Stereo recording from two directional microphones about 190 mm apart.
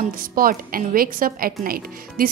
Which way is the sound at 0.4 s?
50° right (ahead or behind).